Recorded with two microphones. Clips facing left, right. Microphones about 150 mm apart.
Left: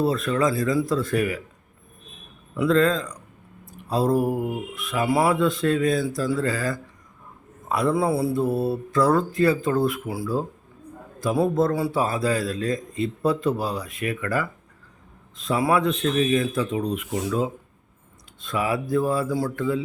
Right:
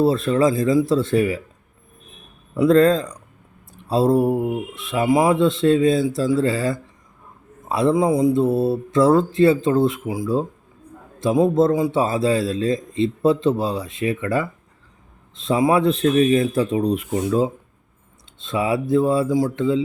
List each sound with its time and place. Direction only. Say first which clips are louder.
0.0 s a man's voice: right 5 dB; 30° right (ahead or behind)
2.6 s a man's voice: right 5 dB; 35° right (ahead or behind)
7.9 s a man's voice: right 5 dB; 15° right (ahead or behind)